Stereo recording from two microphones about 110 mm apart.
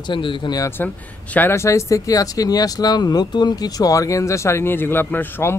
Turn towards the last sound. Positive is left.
turn(degrees=15)  # may be behind; listen again after turning